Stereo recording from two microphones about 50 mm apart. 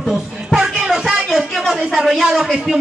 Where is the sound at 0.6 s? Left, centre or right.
Centre.